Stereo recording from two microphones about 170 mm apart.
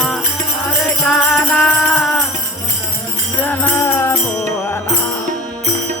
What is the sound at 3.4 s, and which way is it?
Music, 10° left (ahead or behind).